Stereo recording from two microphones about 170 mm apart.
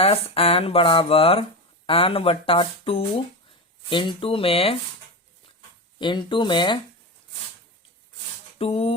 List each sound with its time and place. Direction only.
0.0 s speech: 35° left (ahead or behind)
6.0 s speech: 25° left (ahead or behind)
8.5 s speech: 35° left (ahead or behind)